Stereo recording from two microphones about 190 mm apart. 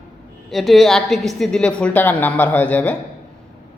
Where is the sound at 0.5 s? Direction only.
Centre (ahead or behind).